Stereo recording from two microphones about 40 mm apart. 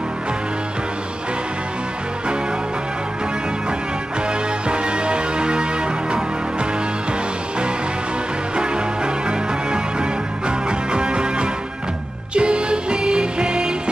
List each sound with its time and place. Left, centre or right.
4.3 s music: right
8.5 s music: right